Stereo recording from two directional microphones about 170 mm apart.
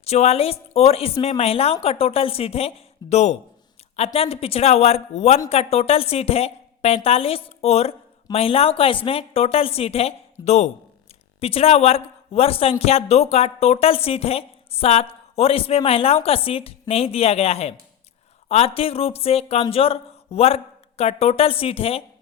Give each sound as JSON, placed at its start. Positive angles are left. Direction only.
{"t": 0.0, "sound": "a woman's voice", "side_deg": 40}